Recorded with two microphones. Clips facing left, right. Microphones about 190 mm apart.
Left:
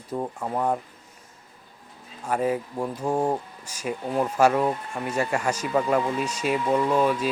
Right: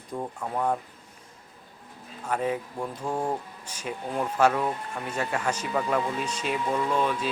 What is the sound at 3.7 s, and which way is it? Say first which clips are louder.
Speech: left 4 dB; 10° left (ahead or behind).